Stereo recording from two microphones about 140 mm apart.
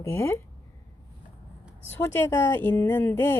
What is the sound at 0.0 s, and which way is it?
Speech, 20° left (ahead or behind).